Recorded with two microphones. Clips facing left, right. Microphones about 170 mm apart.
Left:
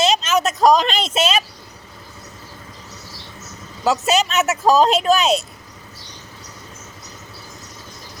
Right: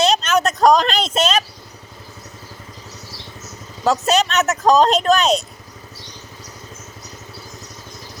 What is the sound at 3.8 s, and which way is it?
Speech, 5° left (ahead or behind).